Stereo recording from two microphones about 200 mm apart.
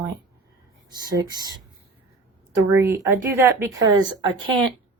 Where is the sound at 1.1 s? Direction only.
20° right (ahead or behind).